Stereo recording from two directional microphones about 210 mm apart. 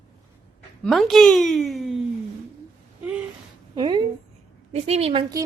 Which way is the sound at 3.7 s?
20° right (ahead or behind).